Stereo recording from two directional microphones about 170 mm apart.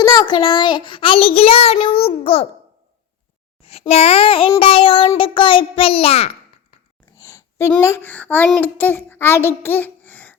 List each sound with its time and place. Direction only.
0.0 s a child's voice: 30° left (ahead or behind)
3.6 s a child's voice: 35° left (ahead or behind)
7.2 s a child's voice: 20° left (ahead or behind)